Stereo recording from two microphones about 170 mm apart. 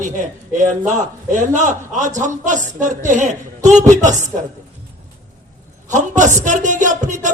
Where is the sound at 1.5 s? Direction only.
45° right (ahead or behind).